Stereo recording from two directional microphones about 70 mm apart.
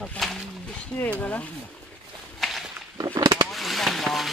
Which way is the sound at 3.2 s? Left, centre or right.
Right.